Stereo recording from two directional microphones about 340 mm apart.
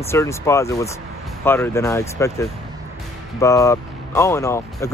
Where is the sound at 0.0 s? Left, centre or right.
Centre.